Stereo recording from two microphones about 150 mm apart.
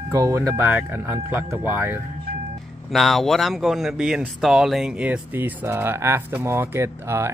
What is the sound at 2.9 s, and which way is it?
Speech, centre (ahead or behind).